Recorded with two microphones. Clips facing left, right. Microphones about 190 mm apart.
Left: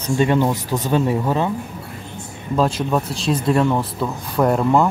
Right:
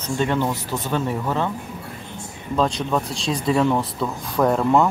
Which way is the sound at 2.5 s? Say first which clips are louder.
Left 2 dB; 5° left (ahead or behind).